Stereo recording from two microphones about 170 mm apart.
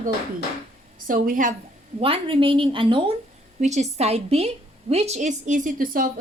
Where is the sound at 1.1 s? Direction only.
55° right (ahead or behind).